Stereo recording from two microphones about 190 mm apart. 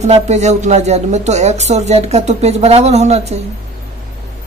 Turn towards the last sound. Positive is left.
turn(degrees=-35)  # may be behind; listen again after turning